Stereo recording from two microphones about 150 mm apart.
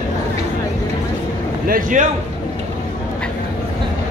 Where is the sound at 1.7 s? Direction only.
60° right (ahead or behind).